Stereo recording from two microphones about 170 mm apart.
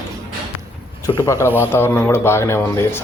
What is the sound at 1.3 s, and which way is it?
Speech, 15° right (ahead or behind).